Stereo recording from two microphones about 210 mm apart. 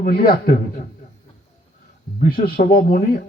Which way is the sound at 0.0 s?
45° left (ahead or behind).